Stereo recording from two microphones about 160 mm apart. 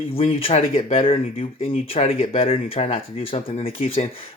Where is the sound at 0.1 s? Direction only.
40° left (ahead or behind).